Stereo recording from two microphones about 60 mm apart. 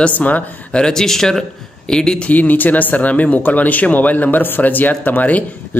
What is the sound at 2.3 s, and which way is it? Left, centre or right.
Speech, left.